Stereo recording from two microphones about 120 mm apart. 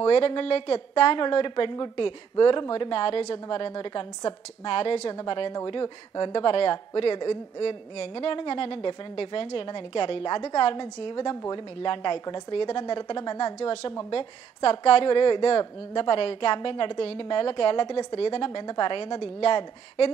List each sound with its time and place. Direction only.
0.0 s speech: 45° left (ahead or behind)
5.1 s speech: 40° left (ahead or behind)